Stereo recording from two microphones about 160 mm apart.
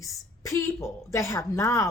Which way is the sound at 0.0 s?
20° left (ahead or behind).